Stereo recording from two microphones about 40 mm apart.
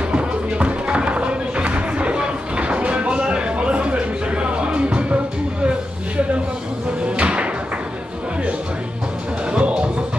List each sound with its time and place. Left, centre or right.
0.1 s music: right
7.0 s music: right
9.5 s music: right